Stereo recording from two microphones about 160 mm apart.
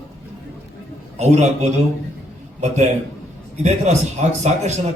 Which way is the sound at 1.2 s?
45° right (ahead or behind).